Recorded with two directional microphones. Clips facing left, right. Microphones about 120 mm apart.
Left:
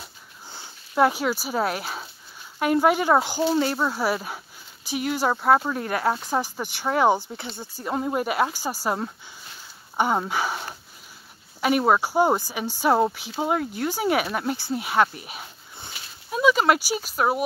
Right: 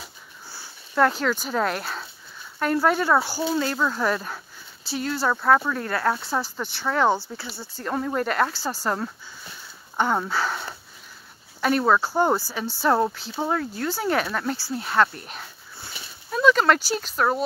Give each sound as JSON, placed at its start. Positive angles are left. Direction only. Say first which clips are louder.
{"t": 0.5, "sound": "speech", "louder": "left 2 dB", "side_deg": 15}
{"t": 11.8, "sound": "speech", "louder": "left 1 dB", "side_deg": 15}
{"t": 15.8, "sound": "a sound", "louder": "even", "side_deg": 10}